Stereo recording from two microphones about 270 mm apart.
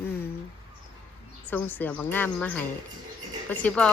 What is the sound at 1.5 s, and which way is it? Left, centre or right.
A woman's voice, centre.